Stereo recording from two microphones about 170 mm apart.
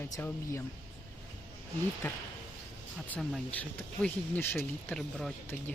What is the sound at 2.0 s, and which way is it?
Speech, 10° left (ahead or behind).